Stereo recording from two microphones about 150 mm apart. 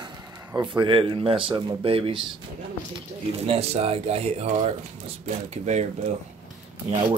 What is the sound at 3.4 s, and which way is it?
Speech, 40° right (ahead or behind).